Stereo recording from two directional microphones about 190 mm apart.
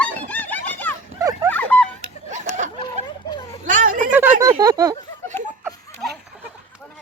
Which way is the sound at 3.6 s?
45° right (ahead or behind).